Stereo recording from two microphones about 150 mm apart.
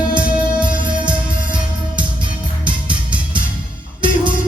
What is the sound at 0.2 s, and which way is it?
Music, 10° right (ahead or behind).